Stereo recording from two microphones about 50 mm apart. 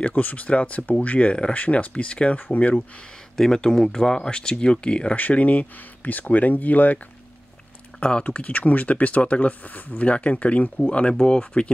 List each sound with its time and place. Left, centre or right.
0.0 s speech: left
3.3 s speech: centre
5.1 s speech: left
8.0 s speech: left